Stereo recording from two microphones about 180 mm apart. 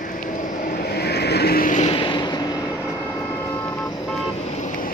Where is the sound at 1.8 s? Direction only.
30° left (ahead or behind).